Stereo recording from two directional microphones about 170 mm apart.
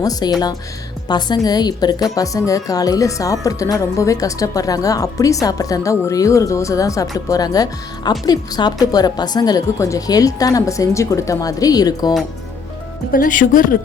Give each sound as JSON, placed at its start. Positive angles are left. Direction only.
{"t": 0.0, "sound": "a woman's voice", "side_deg": 20}
{"t": 13.1, "sound": "speech", "side_deg": 55}